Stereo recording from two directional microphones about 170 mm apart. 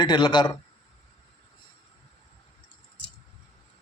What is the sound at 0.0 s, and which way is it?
Speech, 25° left (ahead or behind).